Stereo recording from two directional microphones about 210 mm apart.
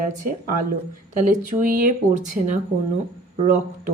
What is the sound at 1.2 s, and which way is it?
Speech, 40° right (ahead or behind).